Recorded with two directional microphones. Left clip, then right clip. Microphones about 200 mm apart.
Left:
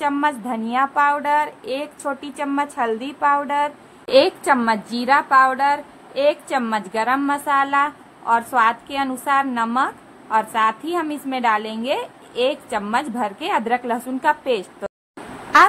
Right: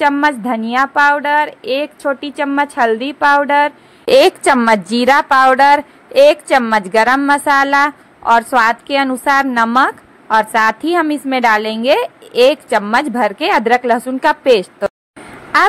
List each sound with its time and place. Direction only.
0.0 s a woman's voice: 25° right (ahead or behind)